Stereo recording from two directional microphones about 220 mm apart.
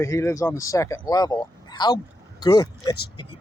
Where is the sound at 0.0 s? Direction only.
15° left (ahead or behind).